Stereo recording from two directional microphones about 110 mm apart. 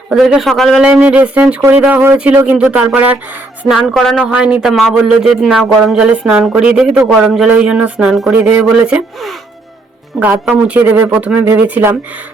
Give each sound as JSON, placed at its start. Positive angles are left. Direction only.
{"t": 0.1, "sound": "speech", "side_deg": 0}
{"t": 0.8, "sound": "speech", "side_deg": -10}
{"t": 3.6, "sound": "speech", "side_deg": -5}
{"t": 4.2, "sound": "speech", "side_deg": -10}
{"t": 10.1, "sound": "speech", "side_deg": 0}
{"t": 10.5, "sound": "speech", "side_deg": -20}